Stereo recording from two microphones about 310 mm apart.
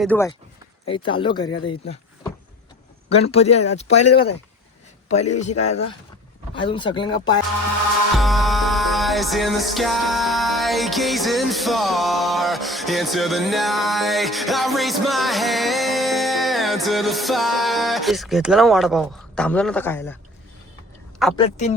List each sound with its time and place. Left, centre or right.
0.0 s speech: centre
3.1 s speech: centre
8.2 s music: centre
21.3 s speech: centre